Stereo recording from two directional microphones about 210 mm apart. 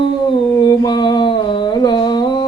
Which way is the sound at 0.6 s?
20° left (ahead or behind).